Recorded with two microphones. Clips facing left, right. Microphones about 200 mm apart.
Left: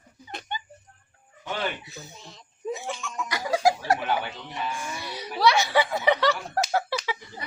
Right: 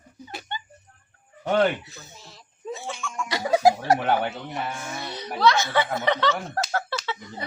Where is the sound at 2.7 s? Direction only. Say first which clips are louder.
Left 2 dB; 15° left (ahead or behind).